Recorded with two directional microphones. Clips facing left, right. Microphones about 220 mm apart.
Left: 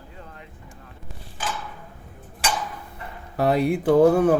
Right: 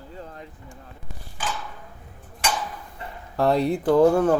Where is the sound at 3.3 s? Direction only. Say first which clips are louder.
Even; 5° left (ahead or behind).